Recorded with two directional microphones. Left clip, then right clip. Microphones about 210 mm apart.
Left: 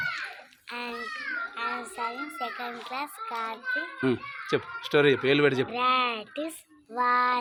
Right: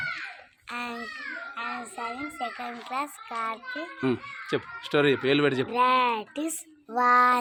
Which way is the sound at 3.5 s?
Centre (ahead or behind).